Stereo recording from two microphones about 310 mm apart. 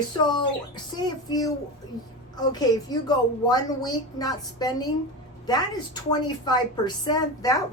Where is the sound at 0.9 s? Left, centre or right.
Centre.